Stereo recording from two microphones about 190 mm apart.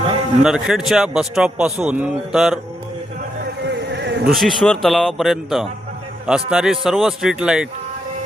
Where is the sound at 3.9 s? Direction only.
65° right (ahead or behind).